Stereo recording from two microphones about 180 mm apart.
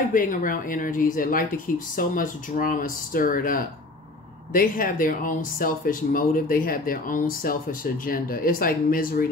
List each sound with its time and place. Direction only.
0.1 s speech: 50° left (ahead or behind)